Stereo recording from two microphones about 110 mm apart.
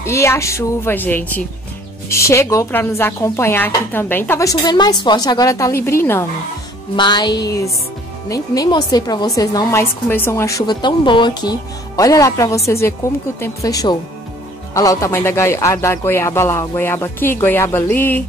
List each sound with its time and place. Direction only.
0.0 s speech: 25° left (ahead or behind)
4.5 s a woman's voice: 35° left (ahead or behind); by 6.2 s 20° left (ahead or behind)
7.0 s a woman's voice: 40° left (ahead or behind); by 10.6 s 25° left (ahead or behind)
10.7 s speech: 45° left (ahead or behind)
12.0 s a woman's voice: 30° left (ahead or behind)